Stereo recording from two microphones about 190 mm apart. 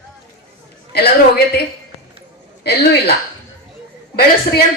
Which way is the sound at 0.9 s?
55° left (ahead or behind).